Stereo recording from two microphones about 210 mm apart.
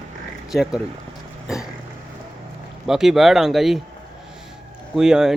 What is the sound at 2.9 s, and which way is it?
Speech, centre (ahead or behind).